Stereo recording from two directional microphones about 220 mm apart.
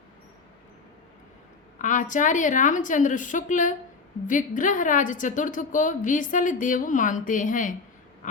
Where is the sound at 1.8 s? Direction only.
35° left (ahead or behind).